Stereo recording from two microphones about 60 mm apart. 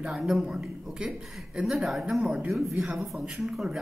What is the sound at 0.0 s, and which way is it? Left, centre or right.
A man's voice, centre.